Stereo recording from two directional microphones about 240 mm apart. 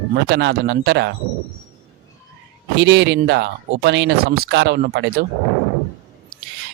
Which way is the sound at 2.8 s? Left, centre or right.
Right.